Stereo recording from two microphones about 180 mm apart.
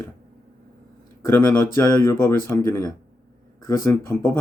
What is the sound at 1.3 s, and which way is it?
Speech, 10° left (ahead or behind).